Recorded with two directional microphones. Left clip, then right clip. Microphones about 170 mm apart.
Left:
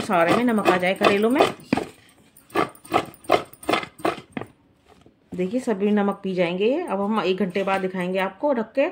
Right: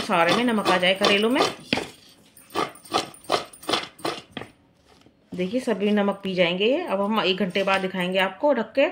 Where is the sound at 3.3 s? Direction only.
30° left (ahead or behind).